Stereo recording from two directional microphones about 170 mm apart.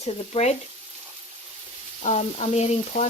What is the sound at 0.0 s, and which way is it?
Frying, 40° left (ahead or behind).